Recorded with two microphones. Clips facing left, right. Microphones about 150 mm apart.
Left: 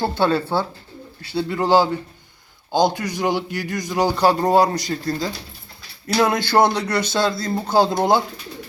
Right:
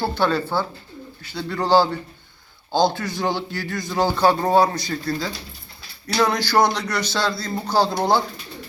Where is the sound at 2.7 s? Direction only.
15° left (ahead or behind).